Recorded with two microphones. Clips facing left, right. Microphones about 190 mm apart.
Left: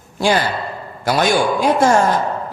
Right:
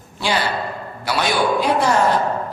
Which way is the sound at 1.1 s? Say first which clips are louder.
Left 3 dB; 45° left (ahead or behind).